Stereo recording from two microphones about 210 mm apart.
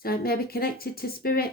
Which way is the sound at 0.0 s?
45° left (ahead or behind).